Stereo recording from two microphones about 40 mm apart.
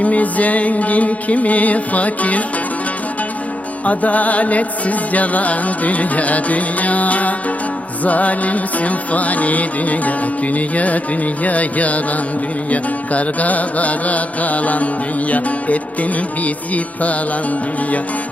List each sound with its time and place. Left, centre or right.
0.0 s music: left
3.8 s music: left